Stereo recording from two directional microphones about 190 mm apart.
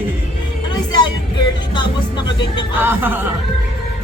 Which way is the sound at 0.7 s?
25° left (ahead or behind).